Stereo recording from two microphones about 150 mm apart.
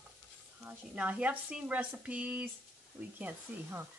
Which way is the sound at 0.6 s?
10° right (ahead or behind).